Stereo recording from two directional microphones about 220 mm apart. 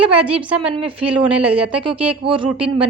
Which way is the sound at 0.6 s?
25° right (ahead or behind).